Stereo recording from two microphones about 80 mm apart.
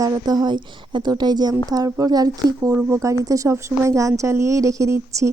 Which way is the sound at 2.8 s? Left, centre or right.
Right.